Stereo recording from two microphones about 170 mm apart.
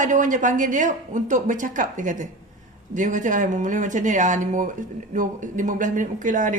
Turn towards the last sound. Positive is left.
turn(degrees=-50)  # may be behind; listen again after turning